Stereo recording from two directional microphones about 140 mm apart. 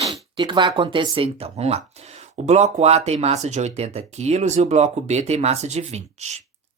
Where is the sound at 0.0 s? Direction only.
35° right (ahead or behind).